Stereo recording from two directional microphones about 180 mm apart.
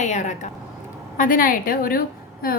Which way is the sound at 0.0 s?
40° left (ahead or behind).